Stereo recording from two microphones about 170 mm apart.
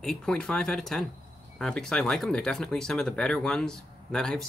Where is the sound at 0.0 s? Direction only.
5° left (ahead or behind).